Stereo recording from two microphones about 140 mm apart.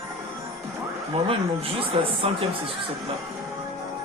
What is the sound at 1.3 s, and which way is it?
Speech, 40° right (ahead or behind).